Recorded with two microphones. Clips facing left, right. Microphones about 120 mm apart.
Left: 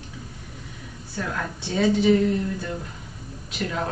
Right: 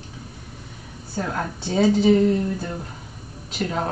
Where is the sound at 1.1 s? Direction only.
35° right (ahead or behind).